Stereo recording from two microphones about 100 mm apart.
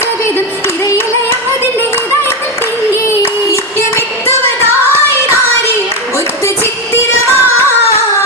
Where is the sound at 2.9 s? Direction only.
25° left (ahead or behind).